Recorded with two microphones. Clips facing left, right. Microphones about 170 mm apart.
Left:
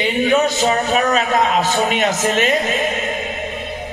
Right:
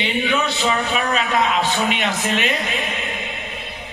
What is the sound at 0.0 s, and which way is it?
A man's voice, 45° left (ahead or behind).